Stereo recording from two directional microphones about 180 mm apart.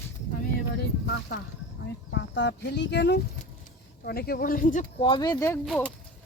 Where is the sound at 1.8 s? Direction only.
75° left (ahead or behind).